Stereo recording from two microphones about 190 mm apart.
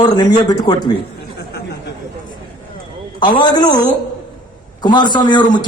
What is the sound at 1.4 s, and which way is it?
Chatter, 55° left (ahead or behind).